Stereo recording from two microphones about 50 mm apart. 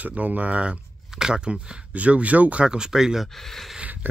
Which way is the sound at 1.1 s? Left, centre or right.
Centre.